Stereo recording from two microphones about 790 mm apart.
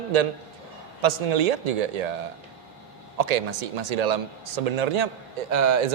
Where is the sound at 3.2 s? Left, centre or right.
Right.